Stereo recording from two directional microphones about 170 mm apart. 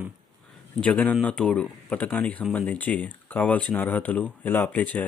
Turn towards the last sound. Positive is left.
turn(degrees=10)  # may be behind; listen again after turning